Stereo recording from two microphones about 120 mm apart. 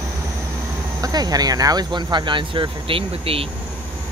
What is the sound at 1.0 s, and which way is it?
Speech, 30° right (ahead or behind).